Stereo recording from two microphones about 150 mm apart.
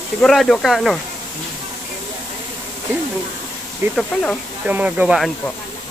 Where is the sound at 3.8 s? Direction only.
15° right (ahead or behind).